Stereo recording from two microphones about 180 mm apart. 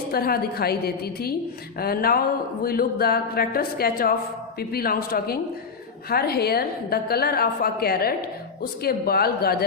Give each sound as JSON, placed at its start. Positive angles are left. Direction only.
{"t": 0.1, "sound": "a woman's voice", "side_deg": 60}